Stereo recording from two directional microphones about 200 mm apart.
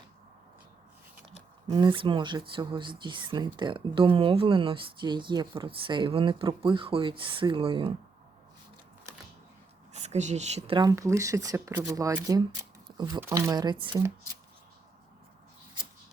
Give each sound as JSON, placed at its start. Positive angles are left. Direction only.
{"t": 1.6, "sound": "speech", "side_deg": -20}
{"t": 9.9, "sound": "speech", "side_deg": -35}